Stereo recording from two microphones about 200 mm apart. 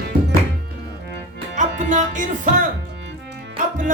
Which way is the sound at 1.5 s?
40° right (ahead or behind).